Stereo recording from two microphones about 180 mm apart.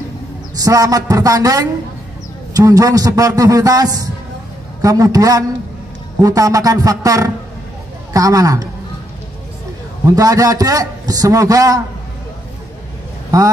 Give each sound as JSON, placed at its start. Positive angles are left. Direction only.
{"t": 0.6, "sound": "a man's voice", "side_deg": -20}
{"t": 10.1, "sound": "a man's voice", "side_deg": -20}
{"t": 13.3, "sound": "a man's voice", "side_deg": -20}